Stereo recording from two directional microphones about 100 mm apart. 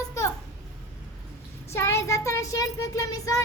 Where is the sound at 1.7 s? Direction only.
25° left (ahead or behind).